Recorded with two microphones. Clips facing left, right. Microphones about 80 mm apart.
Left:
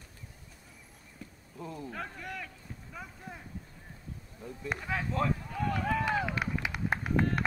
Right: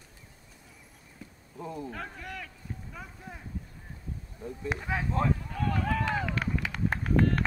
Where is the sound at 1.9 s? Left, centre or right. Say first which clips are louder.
Even; centre.